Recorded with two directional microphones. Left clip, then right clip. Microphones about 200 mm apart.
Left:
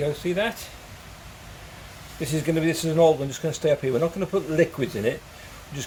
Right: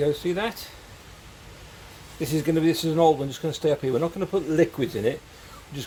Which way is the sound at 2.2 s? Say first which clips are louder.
Right 1 dB; 15° right (ahead or behind).